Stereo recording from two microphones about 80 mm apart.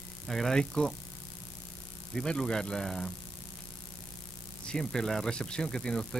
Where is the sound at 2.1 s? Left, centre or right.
Centre.